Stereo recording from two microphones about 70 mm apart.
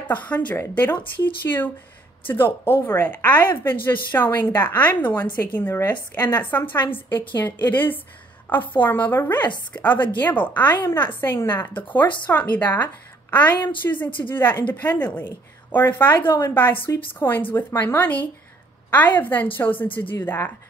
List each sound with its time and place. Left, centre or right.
0.1 s a woman's voice: left
3.1 s a woman's voice: left